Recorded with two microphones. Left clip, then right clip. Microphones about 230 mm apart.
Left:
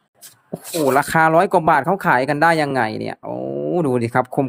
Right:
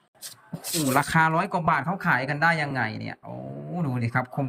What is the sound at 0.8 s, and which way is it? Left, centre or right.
Speech, left.